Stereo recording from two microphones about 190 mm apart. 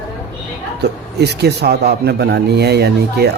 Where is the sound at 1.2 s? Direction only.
60° right (ahead or behind).